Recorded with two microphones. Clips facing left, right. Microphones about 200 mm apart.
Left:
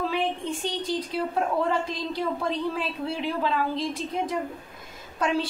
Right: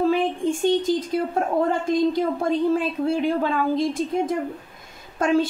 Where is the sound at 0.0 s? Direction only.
45° right (ahead or behind).